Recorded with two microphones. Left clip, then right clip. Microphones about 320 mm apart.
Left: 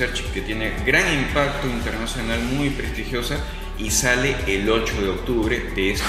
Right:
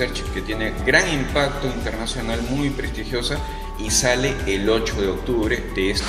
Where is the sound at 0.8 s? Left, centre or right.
Right.